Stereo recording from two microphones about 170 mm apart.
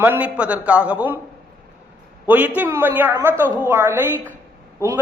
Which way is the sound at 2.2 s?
10° right (ahead or behind).